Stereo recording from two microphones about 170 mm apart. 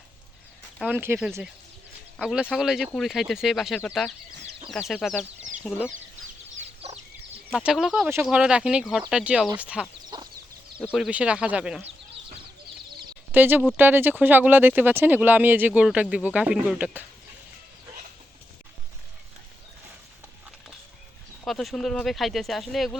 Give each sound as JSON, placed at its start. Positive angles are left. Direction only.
{"t": 0.8, "sound": "speech", "side_deg": -10}
{"t": 6.6, "sound": "chicken", "side_deg": -40}
{"t": 7.5, "sound": "speech", "side_deg": -5}
{"t": 10.1, "sound": "chicken", "side_deg": -25}
{"t": 10.8, "sound": "speech", "side_deg": -5}
{"t": 13.3, "sound": "speech", "side_deg": -10}
{"t": 21.4, "sound": "speech", "side_deg": 0}